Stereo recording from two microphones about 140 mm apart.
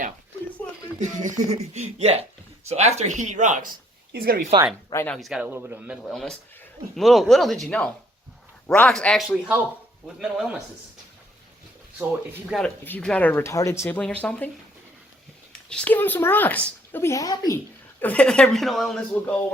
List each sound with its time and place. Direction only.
0.9 s speech: 60° right (ahead or behind)
4.1 s speech: 90° right
5.0 s speech: centre (ahead or behind)
5.5 s a man's voice: 15° right (ahead or behind)
6.1 s a man's voice: 5° left (ahead or behind)
12.5 s speech: centre (ahead or behind); by 14.0 s 20° left (ahead or behind)
14.0 s speech: 10° left (ahead or behind)
15.7 s speech: 10° left (ahead or behind); by 17.6 s 25° left (ahead or behind)
18.0 s speech: 10° left (ahead or behind)
19.1 s speech: 10° left (ahead or behind)